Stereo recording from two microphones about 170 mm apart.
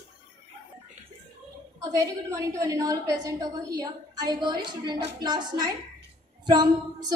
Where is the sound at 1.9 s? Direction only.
20° right (ahead or behind).